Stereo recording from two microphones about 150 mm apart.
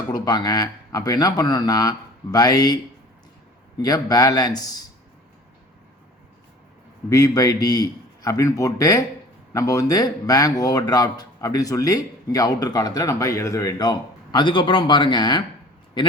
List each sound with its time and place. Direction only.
0.1 s speech: 30° left (ahead or behind)
3.8 s speech: 25° left (ahead or behind)
7.1 s speech: 25° left (ahead or behind)